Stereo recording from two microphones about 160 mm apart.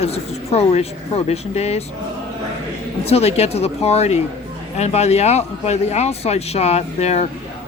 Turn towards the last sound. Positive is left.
turn(degrees=40)  # may be behind; listen again after turning